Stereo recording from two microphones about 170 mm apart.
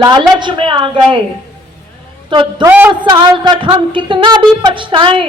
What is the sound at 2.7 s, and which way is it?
Speech, 15° right (ahead or behind).